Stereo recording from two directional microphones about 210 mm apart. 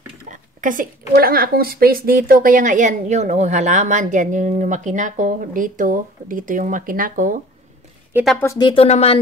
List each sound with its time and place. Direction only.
0.3 s speech: 40° right (ahead or behind)
8.1 s a woman's voice: 5° right (ahead or behind)
8.4 s speech: 15° left (ahead or behind)